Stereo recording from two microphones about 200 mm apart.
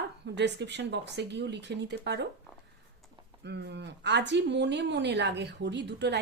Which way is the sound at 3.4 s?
60° right (ahead or behind).